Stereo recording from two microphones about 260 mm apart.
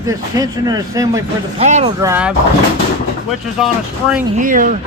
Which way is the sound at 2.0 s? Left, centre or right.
Centre.